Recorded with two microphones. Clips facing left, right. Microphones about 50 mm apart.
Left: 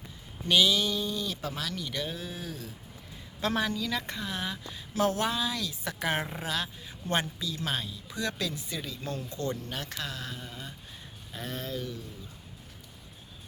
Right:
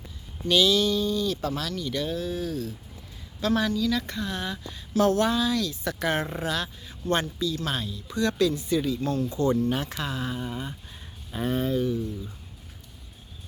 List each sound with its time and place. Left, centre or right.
0.4 s speech: centre
3.4 s a woman's voice: left
4.2 s speech: centre
9.3 s speech: centre